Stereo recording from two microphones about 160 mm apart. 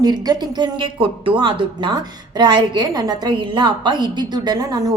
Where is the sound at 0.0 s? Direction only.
25° right (ahead or behind).